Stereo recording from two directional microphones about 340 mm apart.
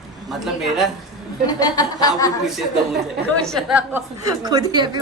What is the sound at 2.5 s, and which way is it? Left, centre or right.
A woman's voice, centre.